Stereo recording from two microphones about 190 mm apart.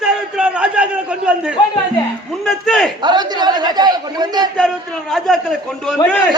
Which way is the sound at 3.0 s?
20° right (ahead or behind).